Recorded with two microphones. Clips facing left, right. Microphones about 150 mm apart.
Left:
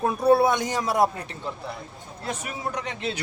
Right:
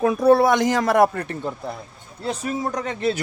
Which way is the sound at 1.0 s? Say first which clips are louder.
Right 5 dB; 55° right (ahead or behind).